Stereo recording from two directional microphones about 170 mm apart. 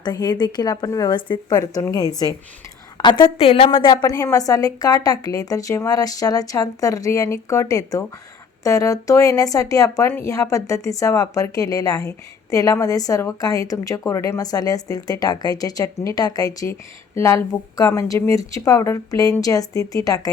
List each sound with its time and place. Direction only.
0.0 s a woman's voice: 25° left (ahead or behind)
3.9 s speech: 20° left (ahead or behind)